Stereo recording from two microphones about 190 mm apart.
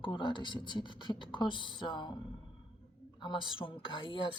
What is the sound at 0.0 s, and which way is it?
Speech, 25° left (ahead or behind).